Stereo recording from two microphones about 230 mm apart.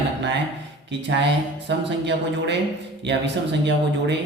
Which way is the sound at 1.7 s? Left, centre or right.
Right.